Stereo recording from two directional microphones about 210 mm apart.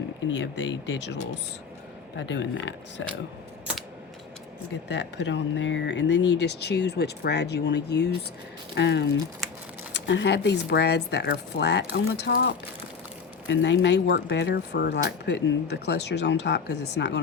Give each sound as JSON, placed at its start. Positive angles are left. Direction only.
{"t": 0.3, "sound": "speech", "side_deg": 60}
{"t": 4.9, "sound": "speech", "side_deg": 55}